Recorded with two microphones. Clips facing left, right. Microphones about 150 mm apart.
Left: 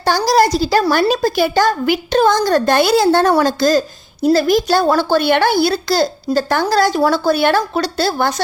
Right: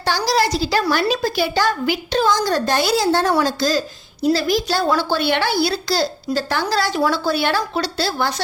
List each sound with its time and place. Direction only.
0.3 s a woman's voice: 45° left (ahead or behind)